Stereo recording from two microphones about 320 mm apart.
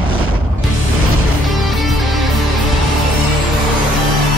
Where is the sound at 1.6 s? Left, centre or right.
Centre.